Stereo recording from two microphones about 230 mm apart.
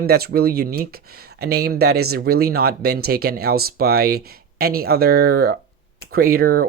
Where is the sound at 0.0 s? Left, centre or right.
Right.